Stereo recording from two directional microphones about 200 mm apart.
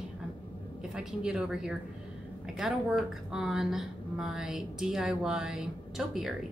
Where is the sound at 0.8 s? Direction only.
5° right (ahead or behind).